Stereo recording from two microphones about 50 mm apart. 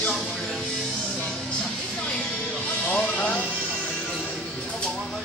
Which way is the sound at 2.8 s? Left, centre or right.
Left.